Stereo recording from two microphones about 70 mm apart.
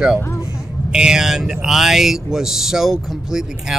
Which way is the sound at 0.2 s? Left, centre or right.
Left.